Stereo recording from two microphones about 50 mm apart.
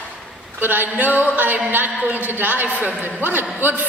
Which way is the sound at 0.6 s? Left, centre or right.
Right.